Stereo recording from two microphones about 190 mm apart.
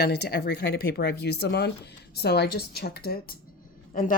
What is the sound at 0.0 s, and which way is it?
Speech, 60° left (ahead or behind).